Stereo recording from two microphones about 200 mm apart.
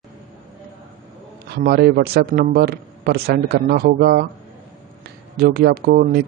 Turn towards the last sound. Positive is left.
turn(degrees=-50)  # may be behind; listen again after turning